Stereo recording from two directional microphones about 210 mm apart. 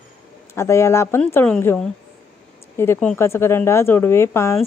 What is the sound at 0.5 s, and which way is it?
Speech, 10° left (ahead or behind).